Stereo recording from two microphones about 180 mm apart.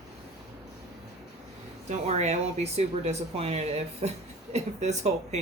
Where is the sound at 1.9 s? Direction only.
35° right (ahead or behind).